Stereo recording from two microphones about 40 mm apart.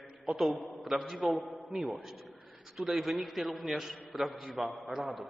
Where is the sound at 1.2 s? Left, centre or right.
Centre.